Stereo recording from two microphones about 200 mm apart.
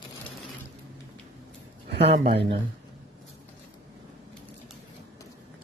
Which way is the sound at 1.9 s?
55° right (ahead or behind).